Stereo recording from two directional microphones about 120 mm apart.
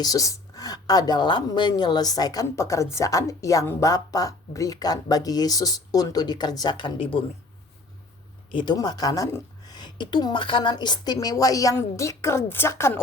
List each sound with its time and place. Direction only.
0.0 s speech: 30° left (ahead or behind); by 7.3 s 50° left (ahead or behind)
8.5 s speech: 35° left (ahead or behind); by 13.0 s 20° left (ahead or behind)